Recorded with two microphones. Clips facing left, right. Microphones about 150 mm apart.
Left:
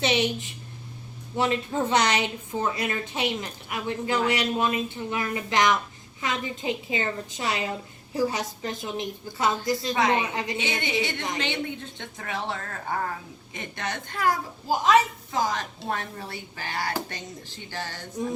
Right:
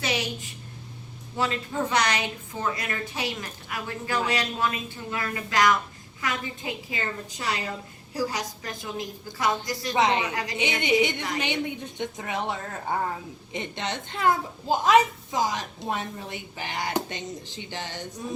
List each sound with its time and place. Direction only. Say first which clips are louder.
0.0 s a woman's voice: left 5 dB; 25° left (ahead or behind)
9.9 s a child's voice: right 2 dB; 20° right (ahead or behind)
10.2 s a woman's voice: left 1 dB; 25° left (ahead or behind)
11.3 s a child's voice: right 1 dB; 15° right (ahead or behind)